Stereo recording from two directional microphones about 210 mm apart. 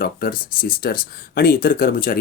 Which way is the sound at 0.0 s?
45° left (ahead or behind).